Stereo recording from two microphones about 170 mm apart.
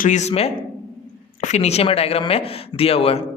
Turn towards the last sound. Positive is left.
turn(degrees=35)  # may be behind; listen again after turning